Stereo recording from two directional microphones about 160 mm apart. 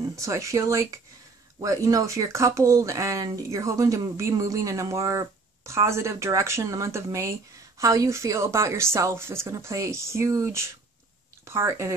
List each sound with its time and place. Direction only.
0.1 s a woman's voice: 20° right (ahead or behind)